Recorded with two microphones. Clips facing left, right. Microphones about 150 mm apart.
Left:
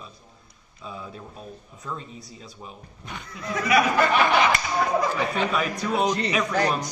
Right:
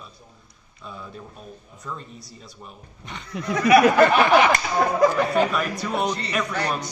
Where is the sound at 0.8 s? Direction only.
5° left (ahead or behind).